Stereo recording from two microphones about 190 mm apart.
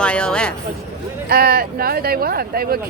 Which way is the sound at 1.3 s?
55° right (ahead or behind).